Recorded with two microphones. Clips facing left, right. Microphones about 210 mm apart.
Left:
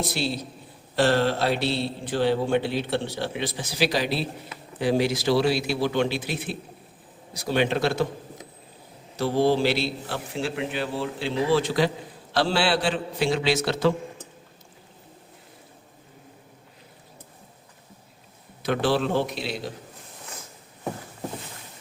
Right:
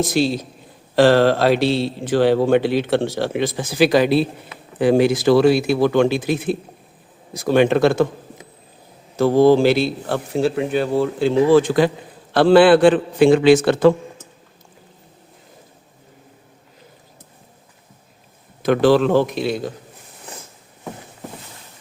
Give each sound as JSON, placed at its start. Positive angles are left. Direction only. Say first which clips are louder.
{"t": 0.0, "sound": "speech", "louder": "right 9 dB", "side_deg": -90}
{"t": 3.2, "sound": "a man's voice", "louder": "right 8 dB", "side_deg": -50}
{"t": 9.1, "sound": "a man's voice", "louder": "right 9 dB", "side_deg": -45}
{"t": 18.6, "sound": "speech", "louder": "right 9 dB", "side_deg": -80}
{"t": 19.2, "sound": "a man's voice", "louder": "right 8 dB", "side_deg": -50}